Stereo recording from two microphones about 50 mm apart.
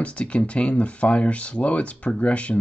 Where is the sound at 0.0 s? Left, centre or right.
Left.